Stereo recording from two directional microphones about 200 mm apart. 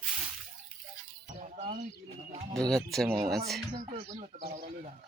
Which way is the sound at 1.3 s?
40° right (ahead or behind).